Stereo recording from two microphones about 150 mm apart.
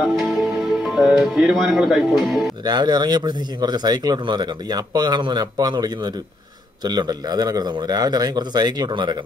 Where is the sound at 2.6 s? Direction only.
30° right (ahead or behind).